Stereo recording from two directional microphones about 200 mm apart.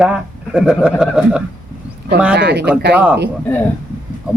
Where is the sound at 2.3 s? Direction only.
55° right (ahead or behind).